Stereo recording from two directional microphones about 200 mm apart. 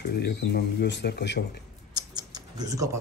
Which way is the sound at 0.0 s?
55° left (ahead or behind).